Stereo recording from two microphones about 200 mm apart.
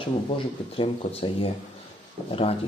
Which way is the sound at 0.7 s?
30° left (ahead or behind).